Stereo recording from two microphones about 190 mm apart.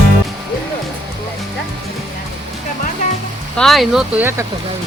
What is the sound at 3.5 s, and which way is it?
Speech, centre (ahead or behind).